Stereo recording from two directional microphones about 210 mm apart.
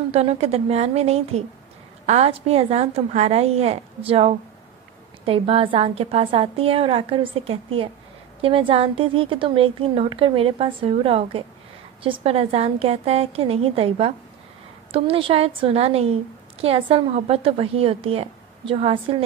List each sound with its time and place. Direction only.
0.1 s a woman's voice: 30° right (ahead or behind)